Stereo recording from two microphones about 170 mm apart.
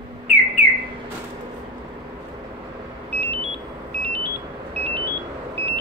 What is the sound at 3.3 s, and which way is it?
Vehicle, 30° right (ahead or behind).